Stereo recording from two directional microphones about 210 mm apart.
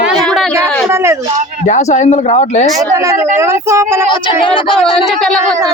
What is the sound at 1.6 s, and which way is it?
Speech, 35° left (ahead or behind).